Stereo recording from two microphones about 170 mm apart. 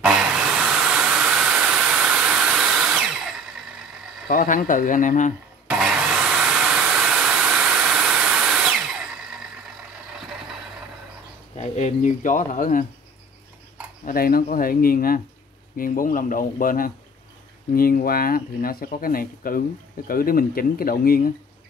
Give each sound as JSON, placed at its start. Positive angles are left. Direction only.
{"t": 0.0, "sound": "hiss", "side_deg": -5}
{"t": 4.3, "sound": "speech", "side_deg": 55}
{"t": 5.7, "sound": "a sound", "side_deg": -5}
{"t": 11.5, "sound": "speech", "side_deg": 40}
{"t": 14.0, "sound": "speech", "side_deg": 60}